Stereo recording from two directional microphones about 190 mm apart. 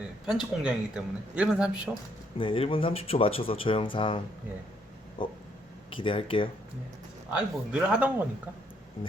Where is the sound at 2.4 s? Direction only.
30° left (ahead or behind).